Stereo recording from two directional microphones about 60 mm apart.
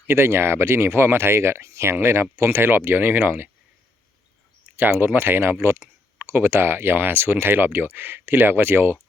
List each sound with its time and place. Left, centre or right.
0.1 s speech: right
4.8 s speech: right